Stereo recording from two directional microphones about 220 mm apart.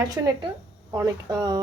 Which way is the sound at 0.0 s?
15° right (ahead or behind).